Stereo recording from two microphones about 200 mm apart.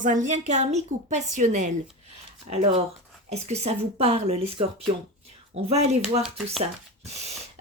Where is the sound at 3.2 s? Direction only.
30° right (ahead or behind).